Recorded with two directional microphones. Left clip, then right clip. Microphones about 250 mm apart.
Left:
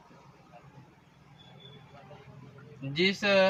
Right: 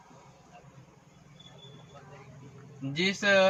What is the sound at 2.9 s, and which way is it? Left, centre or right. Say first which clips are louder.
Speech: right 1 dB; centre.